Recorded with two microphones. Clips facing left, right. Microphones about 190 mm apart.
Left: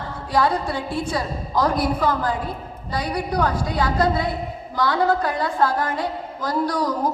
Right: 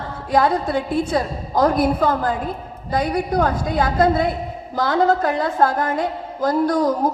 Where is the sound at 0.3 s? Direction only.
45° right (ahead or behind).